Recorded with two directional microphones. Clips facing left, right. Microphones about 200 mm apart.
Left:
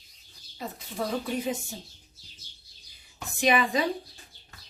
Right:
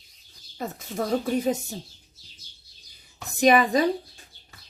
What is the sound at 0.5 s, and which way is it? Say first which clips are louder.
Speech: right 5 dB; 45° right (ahead or behind).